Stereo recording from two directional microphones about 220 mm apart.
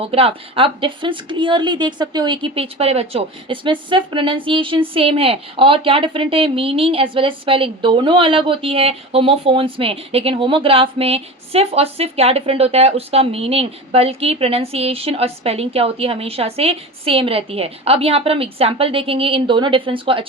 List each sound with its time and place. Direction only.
0.1 s a woman's voice: 25° right (ahead or behind)